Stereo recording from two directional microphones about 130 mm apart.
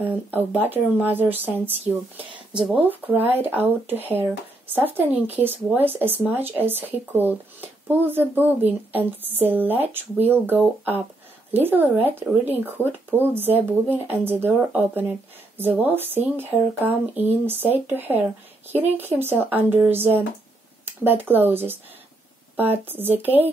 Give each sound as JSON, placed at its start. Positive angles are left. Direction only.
{"t": 0.0, "sound": "speech", "side_deg": -15}